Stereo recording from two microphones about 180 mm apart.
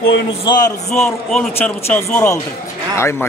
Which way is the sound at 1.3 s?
5° left (ahead or behind).